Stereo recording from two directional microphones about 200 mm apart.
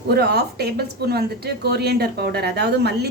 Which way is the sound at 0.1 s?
55° right (ahead or behind).